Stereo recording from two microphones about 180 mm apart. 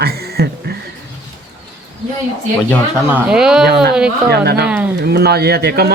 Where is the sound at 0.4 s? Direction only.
60° right (ahead or behind).